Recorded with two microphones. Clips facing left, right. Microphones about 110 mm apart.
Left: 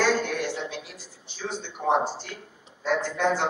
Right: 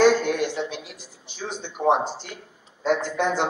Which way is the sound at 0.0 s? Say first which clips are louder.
Right 6 dB; 20° right (ahead or behind).